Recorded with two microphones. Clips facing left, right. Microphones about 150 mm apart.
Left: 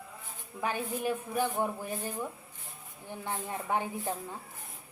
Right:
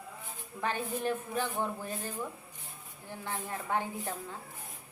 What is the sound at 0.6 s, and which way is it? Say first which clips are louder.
A woman's voice: left 1 dB; 10° left (ahead or behind).